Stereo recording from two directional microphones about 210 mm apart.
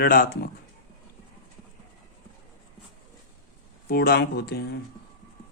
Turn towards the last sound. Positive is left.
turn(degrees=50)  # may be behind; listen again after turning